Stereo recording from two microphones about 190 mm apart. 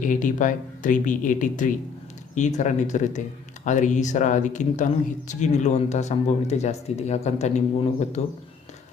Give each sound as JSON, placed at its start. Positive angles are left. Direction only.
{"t": 0.0, "sound": "speech", "side_deg": 45}